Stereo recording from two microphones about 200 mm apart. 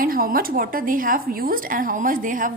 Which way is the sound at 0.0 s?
45° right (ahead or behind).